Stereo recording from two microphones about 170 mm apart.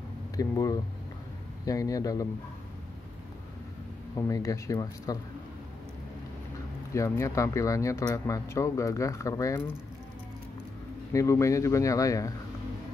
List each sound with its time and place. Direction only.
0.4 s speech: 20° left (ahead or behind)
4.1 s speech: 20° left (ahead or behind)
6.9 s speech: 15° left (ahead or behind)
11.1 s speech: 15° left (ahead or behind)